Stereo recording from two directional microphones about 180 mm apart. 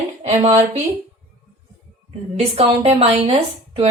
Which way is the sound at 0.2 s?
35° right (ahead or behind).